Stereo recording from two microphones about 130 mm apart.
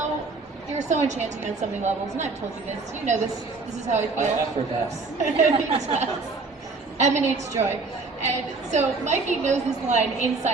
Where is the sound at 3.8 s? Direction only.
65° right (ahead or behind).